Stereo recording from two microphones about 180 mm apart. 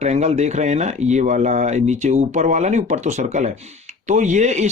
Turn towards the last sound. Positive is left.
turn(degrees=-40)  # may be behind; listen again after turning